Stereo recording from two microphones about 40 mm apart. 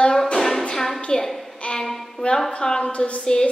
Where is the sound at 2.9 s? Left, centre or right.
Left.